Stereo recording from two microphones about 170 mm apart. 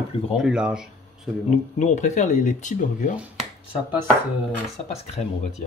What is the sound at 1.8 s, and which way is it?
Speech, 45° left (ahead or behind).